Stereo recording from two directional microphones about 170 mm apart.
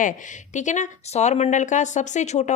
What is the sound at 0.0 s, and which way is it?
A woman's voice, 45° left (ahead or behind).